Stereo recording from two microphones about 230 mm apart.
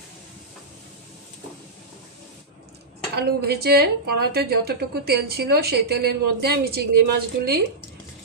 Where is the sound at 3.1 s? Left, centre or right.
Right.